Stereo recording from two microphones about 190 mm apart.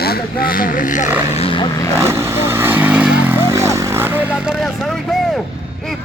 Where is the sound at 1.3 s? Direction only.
30° left (ahead or behind).